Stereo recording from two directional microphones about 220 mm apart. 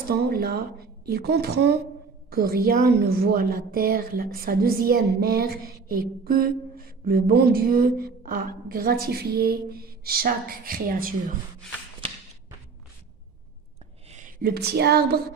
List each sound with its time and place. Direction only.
0.1 s a woman's voice: 45° right (ahead or behind)
14.1 s speech: 40° right (ahead or behind)